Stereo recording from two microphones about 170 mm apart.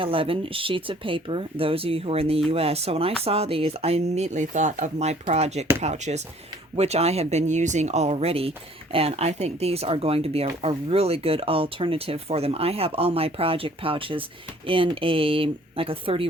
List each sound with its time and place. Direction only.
0.0 s speech: 30° right (ahead or behind)